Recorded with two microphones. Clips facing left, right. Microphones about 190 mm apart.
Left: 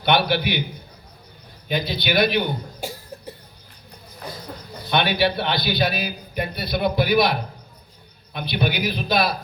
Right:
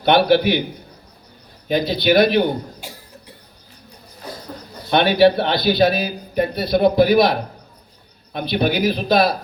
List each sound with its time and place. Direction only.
0.0 s a man's voice: 45° right (ahead or behind)
1.6 s a man's voice: 45° right (ahead or behind)
4.9 s a man's voice: 45° right (ahead or behind)